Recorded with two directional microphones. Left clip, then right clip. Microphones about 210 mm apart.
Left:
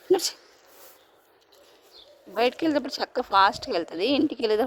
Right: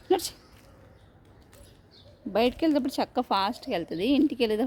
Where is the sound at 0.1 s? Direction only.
15° left (ahead or behind).